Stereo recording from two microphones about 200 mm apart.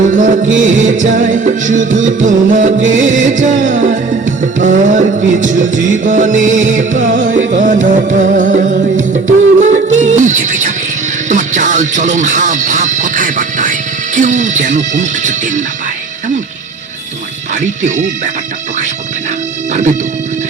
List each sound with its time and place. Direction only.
0.1 s music: 40° right (ahead or behind)
11.3 s speech: 40° right (ahead or behind)
14.2 s music: 40° right (ahead or behind)
17.5 s speech: 40° right (ahead or behind)
19.7 s music: 40° right (ahead or behind)